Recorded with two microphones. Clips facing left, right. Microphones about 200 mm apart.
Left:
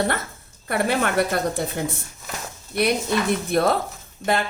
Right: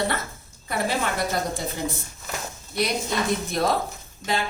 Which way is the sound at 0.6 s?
60° left (ahead or behind).